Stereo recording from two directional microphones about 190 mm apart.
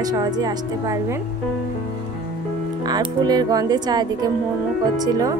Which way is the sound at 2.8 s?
20° right (ahead or behind).